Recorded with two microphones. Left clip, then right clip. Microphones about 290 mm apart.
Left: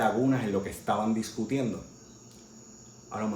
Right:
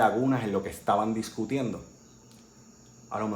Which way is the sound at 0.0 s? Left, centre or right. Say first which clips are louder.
Right 2 dB; centre.